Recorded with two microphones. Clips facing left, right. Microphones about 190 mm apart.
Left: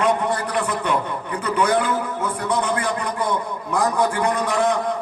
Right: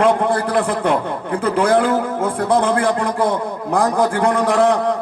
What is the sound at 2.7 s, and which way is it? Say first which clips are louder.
Music: right 6 dB; 55° right (ahead or behind).